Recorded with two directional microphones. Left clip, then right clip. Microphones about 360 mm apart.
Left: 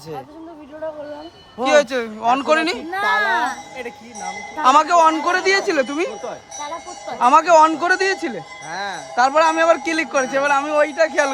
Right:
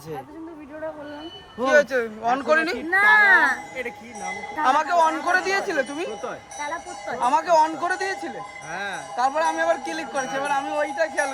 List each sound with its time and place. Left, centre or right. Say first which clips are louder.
1.6 s speech: left 3 dB; centre
4.6 s a man's voice: left 6 dB; centre